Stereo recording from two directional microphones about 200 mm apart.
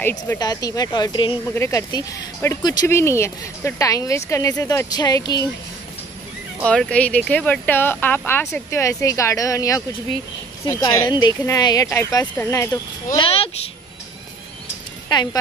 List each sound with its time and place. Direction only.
0.0 s speech: 10° left (ahead or behind)
6.6 s speech: 5° left (ahead or behind); by 13.7 s 30° left (ahead or behind)